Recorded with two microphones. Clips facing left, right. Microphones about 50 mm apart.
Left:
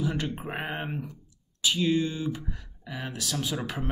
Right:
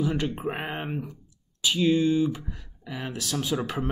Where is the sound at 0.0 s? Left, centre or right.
Centre.